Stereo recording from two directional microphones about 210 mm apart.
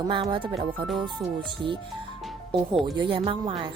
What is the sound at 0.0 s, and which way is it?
A woman's voice, 20° right (ahead or behind).